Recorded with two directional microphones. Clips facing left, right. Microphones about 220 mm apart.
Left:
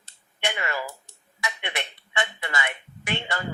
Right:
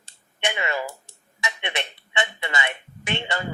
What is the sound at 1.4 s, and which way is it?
Speech, 20° right (ahead or behind).